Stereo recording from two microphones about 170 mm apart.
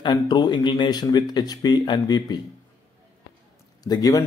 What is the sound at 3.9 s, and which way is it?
Speech, 20° left (ahead or behind).